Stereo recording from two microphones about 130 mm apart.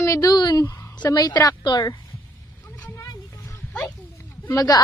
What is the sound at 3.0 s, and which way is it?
Music, 30° left (ahead or behind).